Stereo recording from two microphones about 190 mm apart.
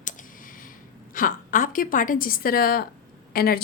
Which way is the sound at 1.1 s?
45° left (ahead or behind).